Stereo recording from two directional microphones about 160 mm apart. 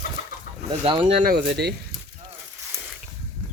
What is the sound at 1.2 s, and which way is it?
Speech, 80° right.